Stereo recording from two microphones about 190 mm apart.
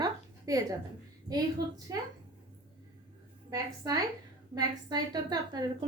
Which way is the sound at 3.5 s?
20° right (ahead or behind).